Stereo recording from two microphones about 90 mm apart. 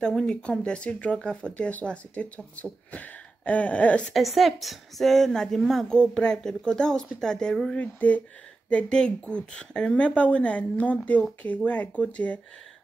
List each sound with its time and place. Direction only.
0.0 s speech: 10° left (ahead or behind)
4.1 s a woman's voice: centre (ahead or behind)
7.8 s speech: 15° left (ahead or behind)